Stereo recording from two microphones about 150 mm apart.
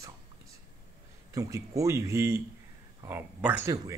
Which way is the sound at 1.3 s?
20° right (ahead or behind).